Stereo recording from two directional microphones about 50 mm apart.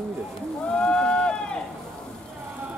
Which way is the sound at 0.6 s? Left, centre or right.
Centre.